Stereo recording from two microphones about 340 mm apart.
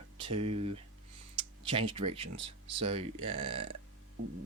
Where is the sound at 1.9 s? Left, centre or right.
Centre.